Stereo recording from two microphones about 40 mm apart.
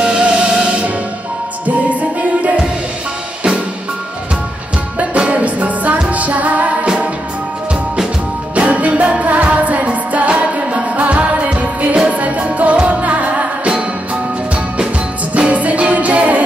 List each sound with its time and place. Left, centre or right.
0.3 s music: centre
1.9 s music: right
5.3 s music: right
8.5 s music: right
15.3 s music: right